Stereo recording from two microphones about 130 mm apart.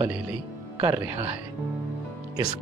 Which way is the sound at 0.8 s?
15° right (ahead or behind).